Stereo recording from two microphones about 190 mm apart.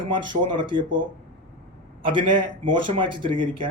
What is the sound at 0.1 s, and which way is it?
Speech, 25° right (ahead or behind).